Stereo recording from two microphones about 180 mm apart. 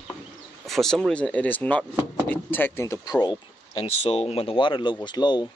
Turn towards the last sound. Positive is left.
turn(degrees=25)  # may be behind; listen again after turning